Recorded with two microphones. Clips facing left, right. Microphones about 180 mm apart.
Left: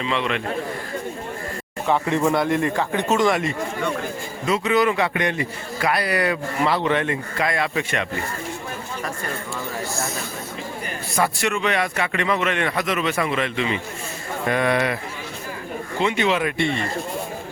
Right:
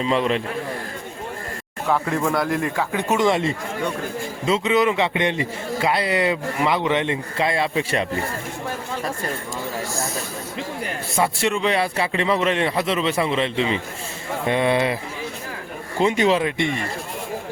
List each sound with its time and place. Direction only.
0.0 s speech: 40° right (ahead or behind)
1.9 s a man's voice: centre (ahead or behind); by 8.2 s 30° right (ahead or behind)
11.2 s a man's voice: 30° right (ahead or behind)
16.0 s speech: 40° right (ahead or behind)
16.6 s speech: 15° right (ahead or behind)